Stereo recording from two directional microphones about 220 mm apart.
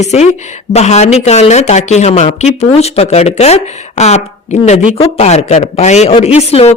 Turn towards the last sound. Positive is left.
turn(degrees=30)  # may be behind; listen again after turning